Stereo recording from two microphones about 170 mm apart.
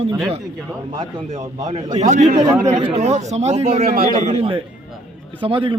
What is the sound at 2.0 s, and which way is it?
A man's voice, 45° right (ahead or behind).